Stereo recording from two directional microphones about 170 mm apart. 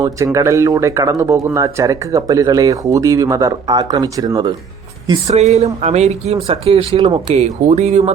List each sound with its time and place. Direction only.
0.3 s speech: 20° right (ahead or behind)
5.3 s speech: 40° right (ahead or behind)